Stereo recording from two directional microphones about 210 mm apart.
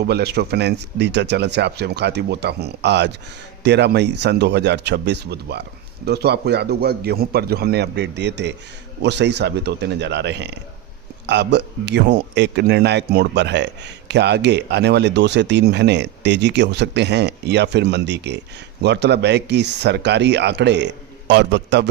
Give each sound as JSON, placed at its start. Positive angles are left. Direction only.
{"t": 0.0, "sound": "a man's voice", "side_deg": -50}